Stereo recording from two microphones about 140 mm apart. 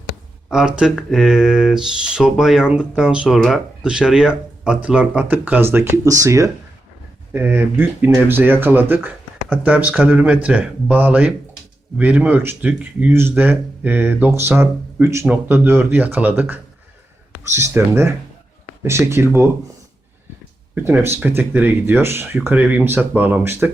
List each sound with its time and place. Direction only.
0.5 s speech: 5° right (ahead or behind)
20.7 s speech: 15° right (ahead or behind)